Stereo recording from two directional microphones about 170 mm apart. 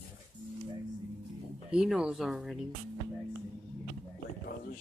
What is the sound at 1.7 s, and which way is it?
Speech, 5° right (ahead or behind).